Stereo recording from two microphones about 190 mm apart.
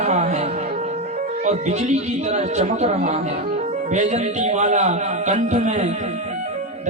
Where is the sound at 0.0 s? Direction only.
35° right (ahead or behind).